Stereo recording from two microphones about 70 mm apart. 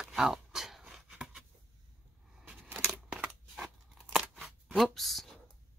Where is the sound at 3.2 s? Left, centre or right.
Centre.